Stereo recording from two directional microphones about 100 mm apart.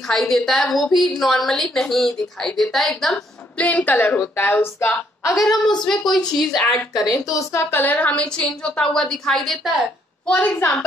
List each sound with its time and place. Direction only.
0.1 s a woman's voice: 5° left (ahead or behind)
3.5 s a woman's voice: 15° left (ahead or behind)
6.1 s a woman's voice: 5° left (ahead or behind)
7.1 s a woman's voice: 35° left (ahead or behind)
7.7 s a woman's voice: 20° left (ahead or behind)
10.2 s a woman's voice: 15° left (ahead or behind)